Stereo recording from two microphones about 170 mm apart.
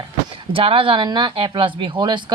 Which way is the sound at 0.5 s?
30° right (ahead or behind).